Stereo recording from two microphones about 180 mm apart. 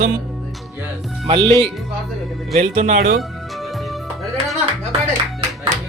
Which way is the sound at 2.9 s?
55° right (ahead or behind).